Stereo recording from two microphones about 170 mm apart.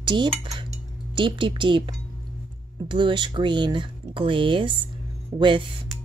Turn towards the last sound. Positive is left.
turn(degrees=-30)  # may be behind; listen again after turning